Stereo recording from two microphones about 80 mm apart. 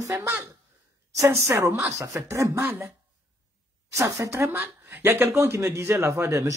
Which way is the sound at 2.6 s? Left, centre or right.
Right.